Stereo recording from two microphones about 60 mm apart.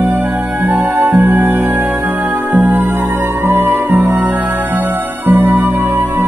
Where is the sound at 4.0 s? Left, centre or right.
Right.